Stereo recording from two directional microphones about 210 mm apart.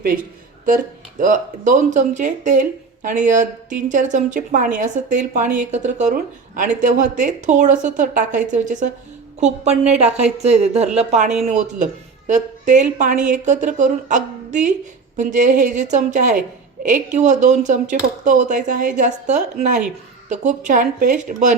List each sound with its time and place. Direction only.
0.7 s speech: 40° right (ahead or behind)